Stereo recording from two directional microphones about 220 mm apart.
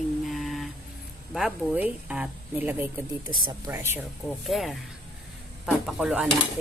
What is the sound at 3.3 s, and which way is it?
Speech, 20° right (ahead or behind).